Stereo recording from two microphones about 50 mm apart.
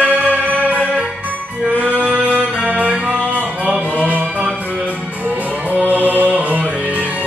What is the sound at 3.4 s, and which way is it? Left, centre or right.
Music, centre.